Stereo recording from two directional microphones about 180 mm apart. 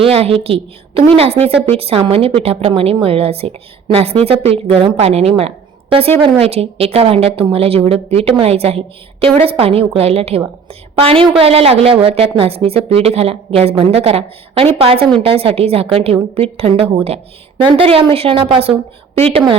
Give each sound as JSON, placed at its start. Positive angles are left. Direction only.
{"t": 0.0, "sound": "a woman's voice", "side_deg": -35}